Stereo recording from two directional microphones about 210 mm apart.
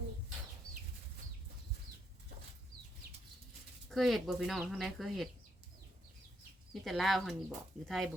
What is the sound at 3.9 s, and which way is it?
Speech, centre (ahead or behind).